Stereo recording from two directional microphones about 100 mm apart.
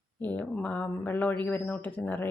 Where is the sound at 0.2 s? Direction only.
15° left (ahead or behind).